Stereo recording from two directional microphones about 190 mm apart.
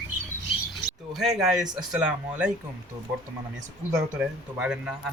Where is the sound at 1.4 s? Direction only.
5° right (ahead or behind).